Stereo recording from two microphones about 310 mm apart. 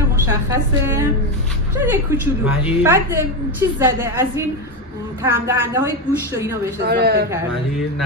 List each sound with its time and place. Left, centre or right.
0.2 s a woman's voice: centre
2.0 s a woman's voice: centre
6.8 s a man's voice: right